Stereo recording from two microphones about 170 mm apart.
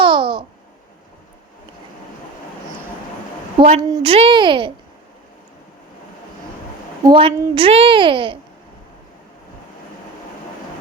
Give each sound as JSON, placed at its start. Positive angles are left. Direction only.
{"t": 0.0, "sound": "babbling", "side_deg": -30}
{"t": 3.6, "sound": "a woman's voice", "side_deg": -35}
{"t": 7.1, "sound": "a woman's voice", "side_deg": -35}